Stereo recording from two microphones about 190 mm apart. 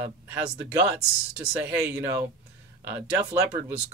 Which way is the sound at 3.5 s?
10° right (ahead or behind).